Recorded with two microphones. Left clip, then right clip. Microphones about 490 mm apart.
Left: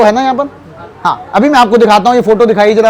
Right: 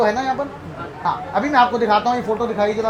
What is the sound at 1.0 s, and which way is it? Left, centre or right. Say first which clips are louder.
A man's voice: left 10 dB; left.